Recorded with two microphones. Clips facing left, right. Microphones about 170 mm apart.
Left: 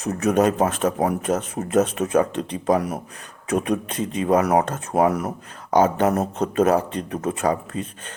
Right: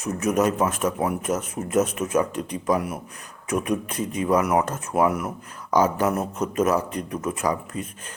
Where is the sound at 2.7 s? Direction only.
40° left (ahead or behind).